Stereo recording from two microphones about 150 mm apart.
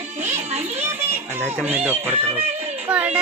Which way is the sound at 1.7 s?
15° right (ahead or behind).